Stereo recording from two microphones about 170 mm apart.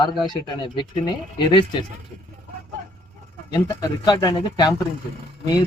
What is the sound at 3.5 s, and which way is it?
Speech, 25° left (ahead or behind).